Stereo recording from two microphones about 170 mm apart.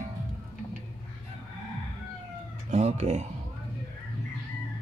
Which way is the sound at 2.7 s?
40° right (ahead or behind).